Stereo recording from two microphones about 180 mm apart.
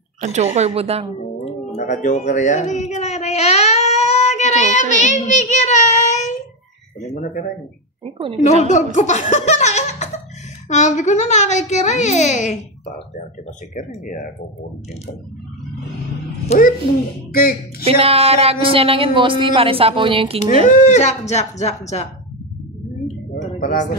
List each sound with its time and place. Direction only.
0.2 s speech: 40° right (ahead or behind)
1.4 s a sound: 40° left (ahead or behind)
5.0 s speech: 45° left (ahead or behind)
8.0 s a woman's voice: 30° right (ahead or behind)
8.6 s speech: 40° left (ahead or behind)
13.7 s speech: 45° left (ahead or behind)
16.5 s speech: 35° left (ahead or behind)
17.3 s speech: 55° left (ahead or behind)
17.8 s speech: 35° right (ahead or behind)
20.6 s speech: 45° left (ahead or behind)
23.3 s a sound: 50° left (ahead or behind)